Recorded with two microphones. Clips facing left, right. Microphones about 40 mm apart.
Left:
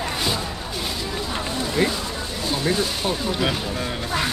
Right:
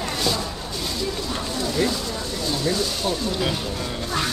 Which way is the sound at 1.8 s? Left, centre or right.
Left.